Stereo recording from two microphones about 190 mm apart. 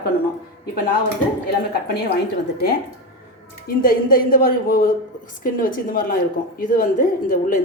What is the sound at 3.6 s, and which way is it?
A woman's voice, 50° left (ahead or behind).